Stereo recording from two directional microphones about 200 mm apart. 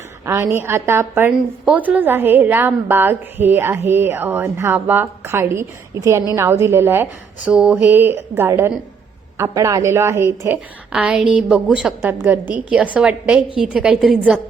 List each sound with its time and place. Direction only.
0.3 s a woman's voice: 15° right (ahead or behind)